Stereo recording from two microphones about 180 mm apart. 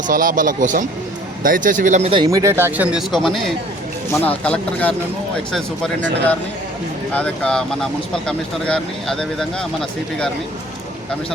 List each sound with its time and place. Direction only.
0.1 s speech: 50° right (ahead or behind)
2.0 s speech: 25° right (ahead or behind); by 9.6 s 5° left (ahead or behind)